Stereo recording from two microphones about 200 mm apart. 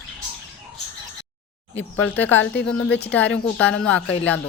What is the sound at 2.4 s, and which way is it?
Speech, 60° left (ahead or behind).